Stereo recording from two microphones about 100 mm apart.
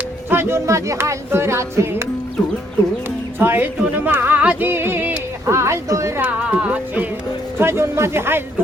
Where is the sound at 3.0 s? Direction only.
20° right (ahead or behind).